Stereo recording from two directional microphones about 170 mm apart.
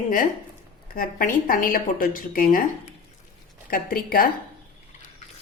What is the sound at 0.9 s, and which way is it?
A woman's voice, 55° left (ahead or behind).